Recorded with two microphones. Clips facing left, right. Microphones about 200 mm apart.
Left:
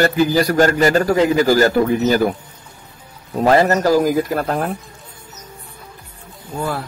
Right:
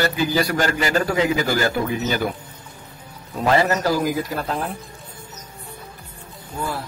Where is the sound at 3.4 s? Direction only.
45° left (ahead or behind).